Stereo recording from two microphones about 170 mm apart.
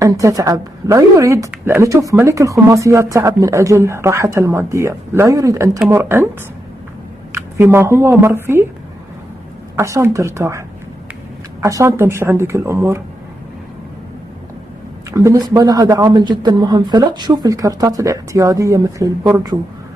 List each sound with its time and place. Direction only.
0.0 s a woman's voice: 20° right (ahead or behind)
7.3 s a woman's voice: 15° right (ahead or behind)
9.8 s a woman's voice: 15° right (ahead or behind)
11.6 s a woman's voice: 15° right (ahead or behind)
15.0 s speech: 20° right (ahead or behind)